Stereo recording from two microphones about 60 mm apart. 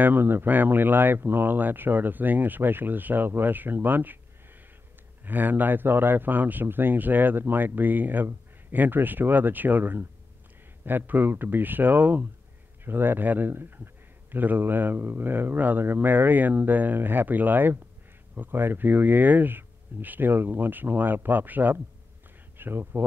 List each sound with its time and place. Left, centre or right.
0.0 s a man's voice: right
5.2 s a man's voice: right